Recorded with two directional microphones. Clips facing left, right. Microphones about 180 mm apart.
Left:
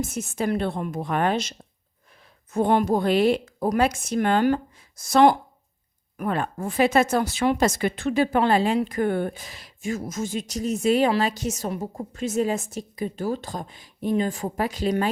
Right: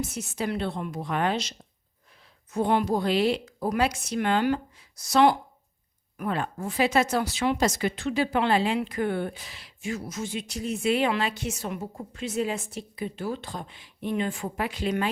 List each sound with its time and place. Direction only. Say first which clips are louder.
0.0 s a woman's voice: left 4 dB; 50° left (ahead or behind)